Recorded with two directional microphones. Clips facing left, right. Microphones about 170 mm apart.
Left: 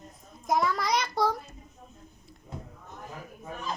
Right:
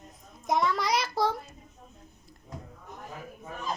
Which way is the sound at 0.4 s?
Centre (ahead or behind).